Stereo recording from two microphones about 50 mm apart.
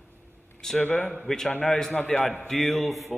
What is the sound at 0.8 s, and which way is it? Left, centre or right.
Speech, left.